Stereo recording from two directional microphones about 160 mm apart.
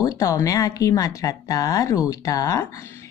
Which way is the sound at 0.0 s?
20° left (ahead or behind).